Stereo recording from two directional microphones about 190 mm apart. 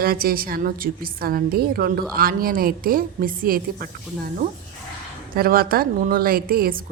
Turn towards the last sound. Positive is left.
turn(degrees=-50)  # may be behind; listen again after turning